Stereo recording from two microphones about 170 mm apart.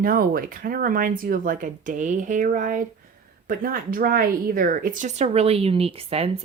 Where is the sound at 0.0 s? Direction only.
55° right (ahead or behind).